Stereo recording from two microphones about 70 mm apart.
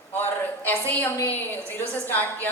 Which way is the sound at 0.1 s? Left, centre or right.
Left.